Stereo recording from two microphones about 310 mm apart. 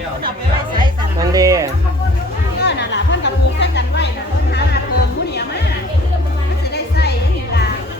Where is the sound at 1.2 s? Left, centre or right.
Centre.